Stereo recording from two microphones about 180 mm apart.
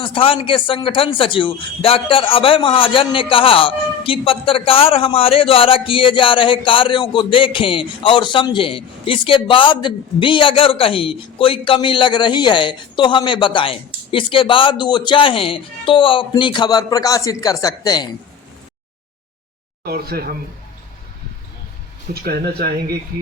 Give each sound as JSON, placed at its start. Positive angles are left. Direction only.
{"t": 0.0, "sound": "speech", "side_deg": 30}
{"t": 19.8, "sound": "speech", "side_deg": -60}
{"t": 22.1, "sound": "speech", "side_deg": -60}